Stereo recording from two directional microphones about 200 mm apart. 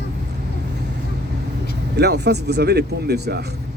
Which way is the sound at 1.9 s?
55° right (ahead or behind).